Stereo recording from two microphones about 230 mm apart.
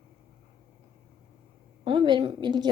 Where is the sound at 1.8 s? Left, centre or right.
Right.